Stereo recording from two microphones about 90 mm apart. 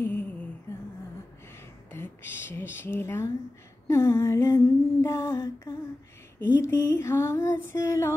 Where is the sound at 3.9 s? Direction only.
30° left (ahead or behind).